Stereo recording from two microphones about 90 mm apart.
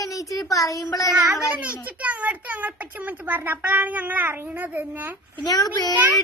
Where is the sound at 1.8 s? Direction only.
15° right (ahead or behind).